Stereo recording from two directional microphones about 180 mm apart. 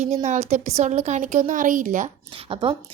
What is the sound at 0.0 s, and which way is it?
A woman's voice, 40° right (ahead or behind).